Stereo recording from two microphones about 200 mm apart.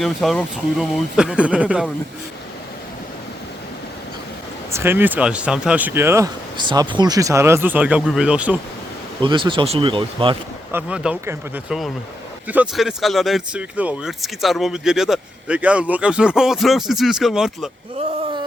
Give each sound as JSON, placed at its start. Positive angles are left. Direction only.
{"t": 0.0, "sound": "speech", "side_deg": 0}
{"t": 4.7, "sound": "speech", "side_deg": -10}
{"t": 9.2, "sound": "speech", "side_deg": -25}
{"t": 10.7, "sound": "speech", "side_deg": -10}